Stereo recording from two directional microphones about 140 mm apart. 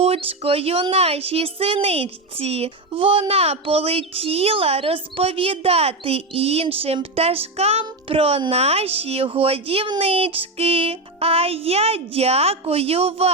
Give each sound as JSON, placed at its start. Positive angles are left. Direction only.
{"t": 0.0, "sound": "a woman's voice", "side_deg": -45}